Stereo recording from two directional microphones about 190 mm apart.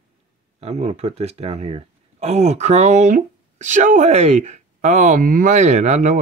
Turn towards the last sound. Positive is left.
turn(degrees=-35)  # may be behind; listen again after turning